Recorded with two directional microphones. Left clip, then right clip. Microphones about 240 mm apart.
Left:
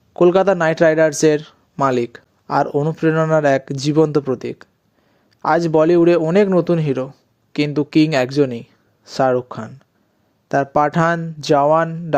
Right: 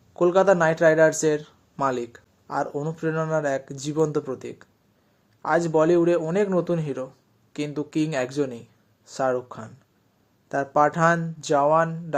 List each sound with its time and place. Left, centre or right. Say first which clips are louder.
0.1 s speech: left 5 dB; left